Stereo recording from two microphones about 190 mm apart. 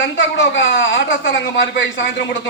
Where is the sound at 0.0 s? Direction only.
75° left (ahead or behind).